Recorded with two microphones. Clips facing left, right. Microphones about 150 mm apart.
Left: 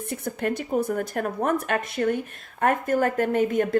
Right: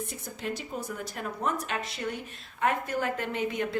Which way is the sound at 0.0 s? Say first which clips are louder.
Left 8 dB; 60° left (ahead or behind).